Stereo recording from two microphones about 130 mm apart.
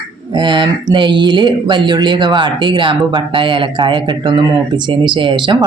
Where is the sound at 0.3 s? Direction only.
35° right (ahead or behind).